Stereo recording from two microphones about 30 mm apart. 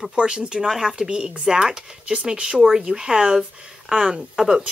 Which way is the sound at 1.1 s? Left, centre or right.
Right.